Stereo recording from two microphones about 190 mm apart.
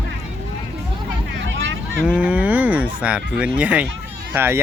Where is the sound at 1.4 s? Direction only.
70° right (ahead or behind).